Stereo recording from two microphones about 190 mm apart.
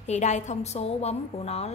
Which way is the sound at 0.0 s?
35° left (ahead or behind).